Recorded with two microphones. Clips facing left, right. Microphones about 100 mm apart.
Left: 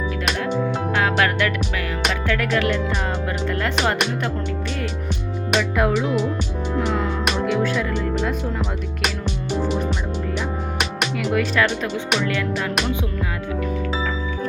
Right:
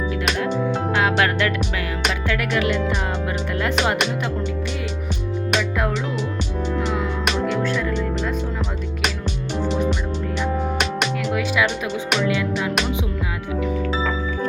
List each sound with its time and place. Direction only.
0.9 s music: 20° right (ahead or behind)
5.5 s music: centre (ahead or behind)
9.6 s music: 5° left (ahead or behind)
12.2 s music: 15° right (ahead or behind)